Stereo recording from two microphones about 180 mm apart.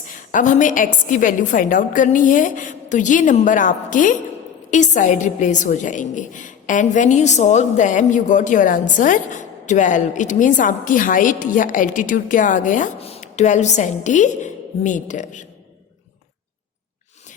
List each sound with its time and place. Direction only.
0.2 s a woman's voice: 45° left (ahead or behind)